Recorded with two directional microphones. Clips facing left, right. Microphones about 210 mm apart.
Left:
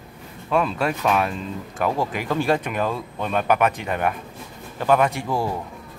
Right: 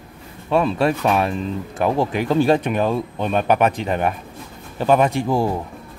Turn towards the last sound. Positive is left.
turn(degrees=-20)  # may be behind; listen again after turning